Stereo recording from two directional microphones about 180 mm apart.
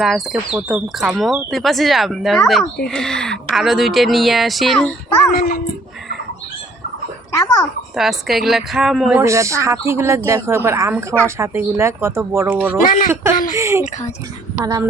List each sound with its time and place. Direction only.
0.0 s speech: centre (ahead or behind)
5.3 s a child's voice: 55° left (ahead or behind)
7.3 s a child's voice: 20° left (ahead or behind)
7.9 s speech: centre (ahead or behind)
9.2 s speech: 15° right (ahead or behind)
12.8 s speech: 50° left (ahead or behind)
13.6 s a sound: 15° right (ahead or behind)
14.6 s speech: 20° right (ahead or behind)